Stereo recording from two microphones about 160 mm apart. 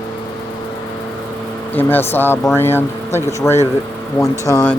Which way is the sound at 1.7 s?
10° left (ahead or behind).